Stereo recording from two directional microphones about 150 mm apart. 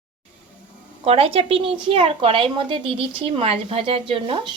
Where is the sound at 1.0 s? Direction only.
40° right (ahead or behind).